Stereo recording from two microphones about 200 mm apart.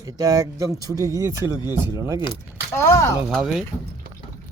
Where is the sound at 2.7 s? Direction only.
15° left (ahead or behind).